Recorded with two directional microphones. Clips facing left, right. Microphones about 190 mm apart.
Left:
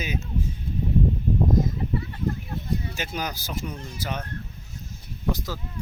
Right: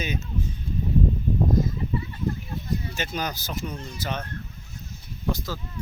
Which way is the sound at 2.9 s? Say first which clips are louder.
Right 1 dB; 10° left (ahead or behind).